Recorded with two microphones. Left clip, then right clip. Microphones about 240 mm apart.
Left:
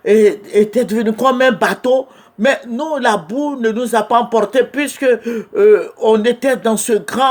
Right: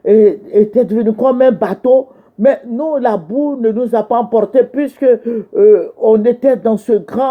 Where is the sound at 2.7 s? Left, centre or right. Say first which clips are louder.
Right 3 dB; left.